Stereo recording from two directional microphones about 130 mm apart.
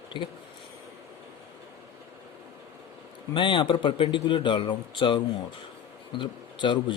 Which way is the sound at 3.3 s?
40° left (ahead or behind).